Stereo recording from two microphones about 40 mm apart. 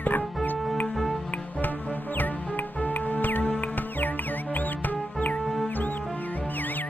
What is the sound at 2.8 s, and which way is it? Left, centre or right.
Music, left.